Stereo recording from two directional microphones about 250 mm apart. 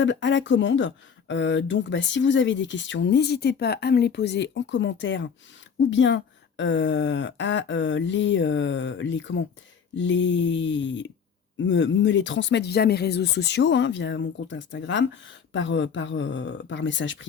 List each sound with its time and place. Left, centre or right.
0.0 s speech: left